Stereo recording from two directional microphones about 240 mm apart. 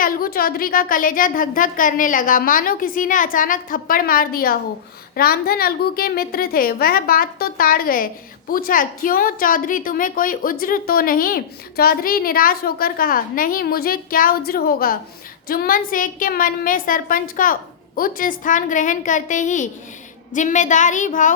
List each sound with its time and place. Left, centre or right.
0.0 s a woman's voice: left